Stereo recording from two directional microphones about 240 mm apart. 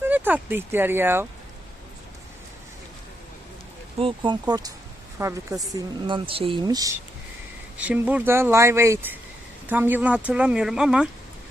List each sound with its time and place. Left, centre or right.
0.0 s speech: centre
3.9 s speech: right; by 11.1 s centre